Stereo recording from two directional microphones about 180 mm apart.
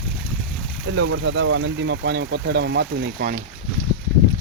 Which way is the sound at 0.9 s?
90° right.